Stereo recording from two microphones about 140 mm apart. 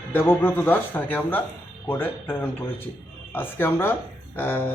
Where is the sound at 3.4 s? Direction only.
15° left (ahead or behind).